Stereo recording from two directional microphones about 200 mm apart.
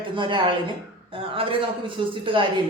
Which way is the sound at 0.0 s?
25° right (ahead or behind).